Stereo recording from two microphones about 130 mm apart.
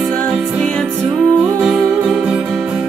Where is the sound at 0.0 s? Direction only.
5° left (ahead or behind).